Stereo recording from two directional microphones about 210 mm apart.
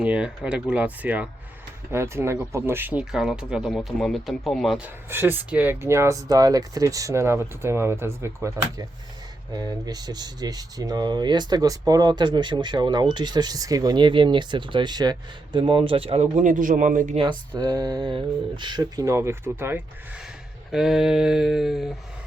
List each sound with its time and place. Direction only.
0.0 s speech: 5° right (ahead or behind); by 17.2 s 40° right (ahead or behind)
17.2 s speech: 20° right (ahead or behind); by 21.9 s centre (ahead or behind)